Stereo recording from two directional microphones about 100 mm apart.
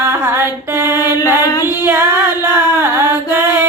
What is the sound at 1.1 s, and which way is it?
Music, 25° right (ahead or behind).